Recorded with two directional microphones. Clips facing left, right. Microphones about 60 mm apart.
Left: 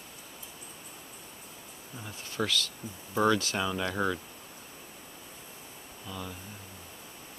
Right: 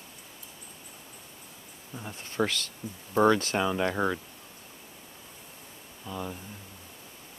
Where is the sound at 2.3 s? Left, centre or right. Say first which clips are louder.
Right 2 dB; right.